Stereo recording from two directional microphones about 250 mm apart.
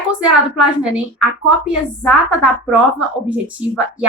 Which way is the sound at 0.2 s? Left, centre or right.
Centre.